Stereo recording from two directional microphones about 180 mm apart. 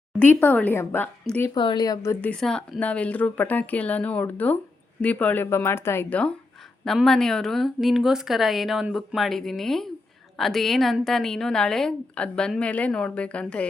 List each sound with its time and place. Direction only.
0.2 s a woman's voice: 10° left (ahead or behind)
1.5 s a woman's voice: 25° left (ahead or behind)
2.3 s a woman's voice: 5° left (ahead or behind)